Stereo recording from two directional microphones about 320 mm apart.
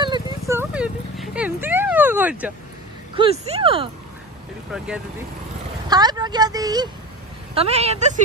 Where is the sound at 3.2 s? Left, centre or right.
Centre.